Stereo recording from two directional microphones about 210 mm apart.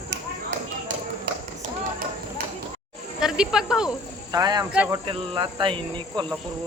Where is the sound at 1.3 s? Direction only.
50° right (ahead or behind).